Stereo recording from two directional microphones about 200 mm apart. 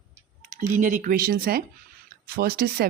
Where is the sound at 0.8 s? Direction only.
40° right (ahead or behind).